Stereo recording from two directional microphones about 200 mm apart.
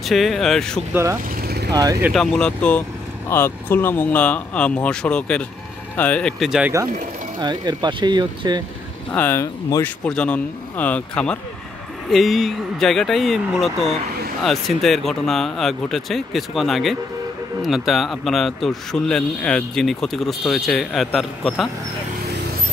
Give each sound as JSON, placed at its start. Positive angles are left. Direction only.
{"t": 0.0, "sound": "speech", "side_deg": 0}
{"t": 1.7, "sound": "speech", "side_deg": -20}
{"t": 2.1, "sound": "speech", "side_deg": 5}
{"t": 7.3, "sound": "speech", "side_deg": -20}
{"t": 9.1, "sound": "speech", "side_deg": 10}